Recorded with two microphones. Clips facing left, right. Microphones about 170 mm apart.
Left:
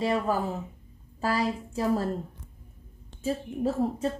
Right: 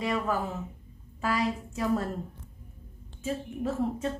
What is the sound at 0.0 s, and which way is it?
A woman's voice, 30° left (ahead or behind).